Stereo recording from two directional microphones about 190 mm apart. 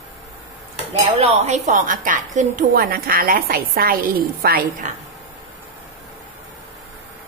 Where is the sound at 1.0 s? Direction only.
35° right (ahead or behind).